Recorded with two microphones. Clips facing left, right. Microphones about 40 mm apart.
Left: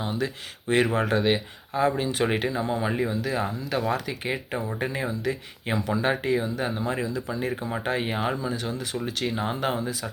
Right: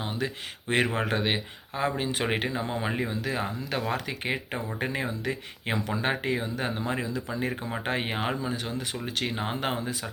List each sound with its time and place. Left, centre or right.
0.0 s speech: right
6.9 s speech: right